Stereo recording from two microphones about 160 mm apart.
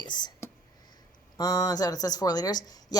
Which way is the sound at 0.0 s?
25° left (ahead or behind).